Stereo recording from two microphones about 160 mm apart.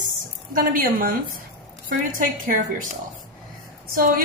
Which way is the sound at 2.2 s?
55° right (ahead or behind).